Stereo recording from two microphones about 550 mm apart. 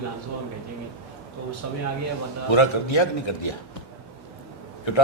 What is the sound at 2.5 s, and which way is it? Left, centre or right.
A man's voice, left.